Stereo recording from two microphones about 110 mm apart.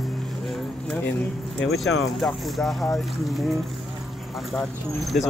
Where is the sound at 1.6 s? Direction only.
Centre (ahead or behind).